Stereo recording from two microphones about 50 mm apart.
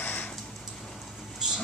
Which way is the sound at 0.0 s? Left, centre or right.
Left.